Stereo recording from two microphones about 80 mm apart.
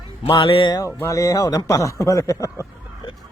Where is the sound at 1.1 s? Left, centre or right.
Left.